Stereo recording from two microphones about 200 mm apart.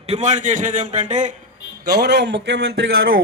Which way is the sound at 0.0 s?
35° right (ahead or behind).